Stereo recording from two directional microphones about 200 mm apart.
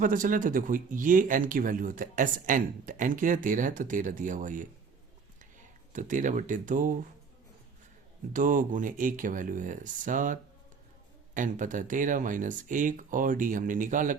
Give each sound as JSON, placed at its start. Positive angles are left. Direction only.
{"t": 0.0, "sound": "speech", "side_deg": -40}
{"t": 8.3, "sound": "speech", "side_deg": -40}
{"t": 11.3, "sound": "speech", "side_deg": -40}